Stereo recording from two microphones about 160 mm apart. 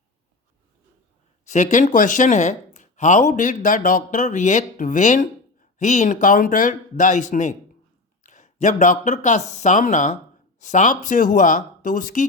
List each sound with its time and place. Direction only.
1.5 s speech: 50° left (ahead or behind)